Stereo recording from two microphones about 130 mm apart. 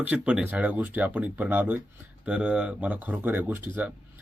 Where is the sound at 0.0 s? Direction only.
10° right (ahead or behind).